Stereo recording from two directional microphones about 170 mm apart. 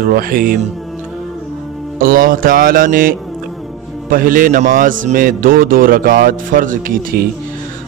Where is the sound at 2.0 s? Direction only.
55° right (ahead or behind).